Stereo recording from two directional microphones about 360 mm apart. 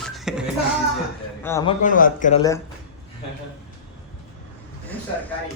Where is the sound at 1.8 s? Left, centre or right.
Left.